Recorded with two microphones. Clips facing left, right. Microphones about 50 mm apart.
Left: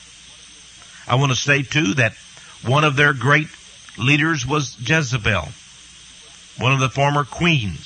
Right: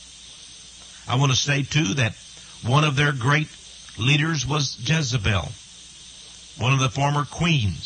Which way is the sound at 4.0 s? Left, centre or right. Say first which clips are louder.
Left 5 dB; left.